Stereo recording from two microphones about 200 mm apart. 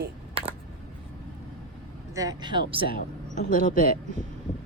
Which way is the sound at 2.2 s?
20° right (ahead or behind).